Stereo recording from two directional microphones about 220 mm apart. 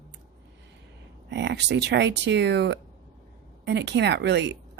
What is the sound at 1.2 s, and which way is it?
Speech, 55° right (ahead or behind).